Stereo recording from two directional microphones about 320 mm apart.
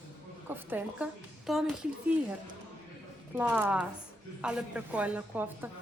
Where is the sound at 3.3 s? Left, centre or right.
Centre.